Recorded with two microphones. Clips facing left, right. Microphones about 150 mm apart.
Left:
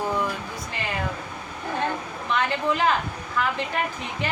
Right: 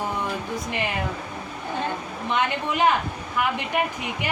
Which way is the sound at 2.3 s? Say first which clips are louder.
Left 1 dB; 20° right (ahead or behind).